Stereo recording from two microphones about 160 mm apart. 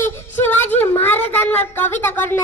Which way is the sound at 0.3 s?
10° left (ahead or behind).